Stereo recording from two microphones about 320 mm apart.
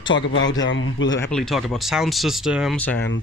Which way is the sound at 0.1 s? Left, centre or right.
Left.